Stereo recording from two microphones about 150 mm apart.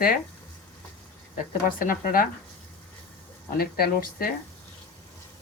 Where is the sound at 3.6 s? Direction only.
80° left.